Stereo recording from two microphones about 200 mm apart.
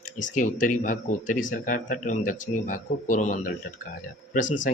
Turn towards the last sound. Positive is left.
turn(degrees=40)  # may be behind; listen again after turning